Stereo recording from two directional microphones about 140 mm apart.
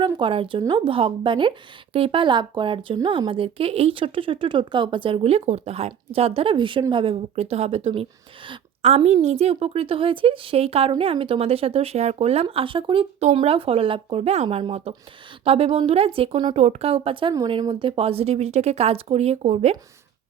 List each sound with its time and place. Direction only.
0.0 s a woman's voice: 40° right (ahead or behind)
16.6 s a woman's voice: 50° right (ahead or behind)